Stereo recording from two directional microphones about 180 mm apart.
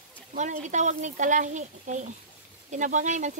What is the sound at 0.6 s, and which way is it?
A woman's voice, 40° right (ahead or behind).